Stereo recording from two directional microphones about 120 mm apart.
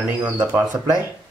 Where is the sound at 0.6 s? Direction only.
30° right (ahead or behind).